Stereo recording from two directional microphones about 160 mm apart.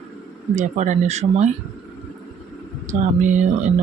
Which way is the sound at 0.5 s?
50° right (ahead or behind).